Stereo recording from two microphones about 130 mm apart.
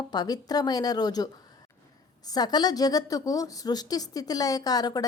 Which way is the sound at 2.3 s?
30° left (ahead or behind).